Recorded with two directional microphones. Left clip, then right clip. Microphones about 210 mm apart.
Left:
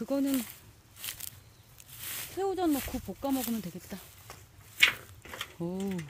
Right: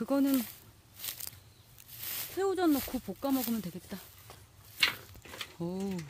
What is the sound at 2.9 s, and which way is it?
Speech, 10° right (ahead or behind).